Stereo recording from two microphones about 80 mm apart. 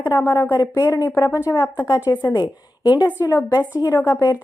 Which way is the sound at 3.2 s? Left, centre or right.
Left.